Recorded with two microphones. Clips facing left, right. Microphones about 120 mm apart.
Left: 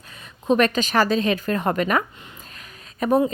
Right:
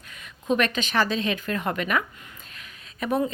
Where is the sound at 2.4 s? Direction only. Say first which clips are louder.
Left 3 dB; 40° left (ahead or behind).